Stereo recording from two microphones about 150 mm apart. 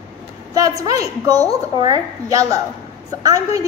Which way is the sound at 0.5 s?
25° right (ahead or behind).